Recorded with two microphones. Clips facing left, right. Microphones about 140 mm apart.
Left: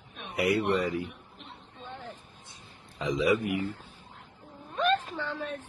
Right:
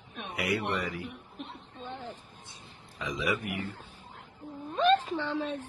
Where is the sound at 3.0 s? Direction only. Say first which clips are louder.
Left 6 dB; 25° left (ahead or behind).